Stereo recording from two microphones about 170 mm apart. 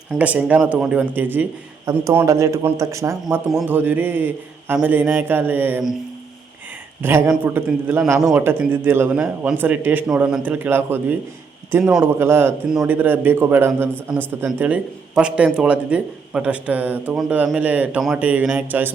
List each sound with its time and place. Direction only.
0.2 s a man's voice: 10° right (ahead or behind)
7.0 s a man's voice: 10° right (ahead or behind)